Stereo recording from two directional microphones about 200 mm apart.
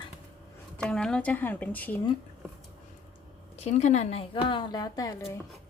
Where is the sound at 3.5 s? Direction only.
35° left (ahead or behind); by 5.2 s 15° left (ahead or behind).